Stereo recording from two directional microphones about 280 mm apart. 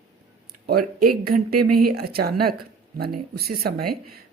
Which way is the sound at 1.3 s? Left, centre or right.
Right.